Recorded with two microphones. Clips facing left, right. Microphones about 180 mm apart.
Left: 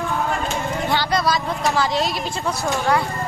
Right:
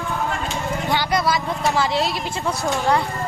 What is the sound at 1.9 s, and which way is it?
Music, 20° left (ahead or behind).